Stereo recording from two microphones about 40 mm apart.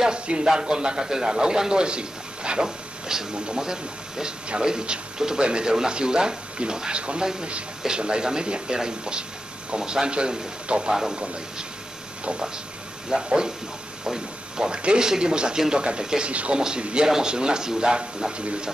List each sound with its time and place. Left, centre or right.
0.0 s a man's voice: right
13.1 s speech: centre
16.3 s speech: right